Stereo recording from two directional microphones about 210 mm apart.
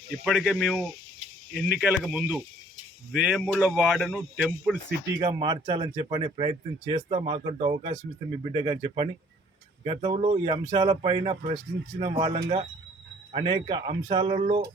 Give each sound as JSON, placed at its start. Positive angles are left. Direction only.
{"t": 0.3, "sound": "speech", "side_deg": 0}
{"t": 5.1, "sound": "speech", "side_deg": -20}